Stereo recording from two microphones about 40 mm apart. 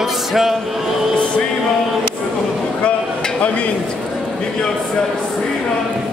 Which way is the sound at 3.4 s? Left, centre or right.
Left.